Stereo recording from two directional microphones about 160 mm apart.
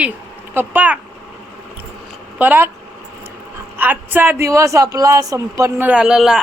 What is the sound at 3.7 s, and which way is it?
Speech, 10° right (ahead or behind).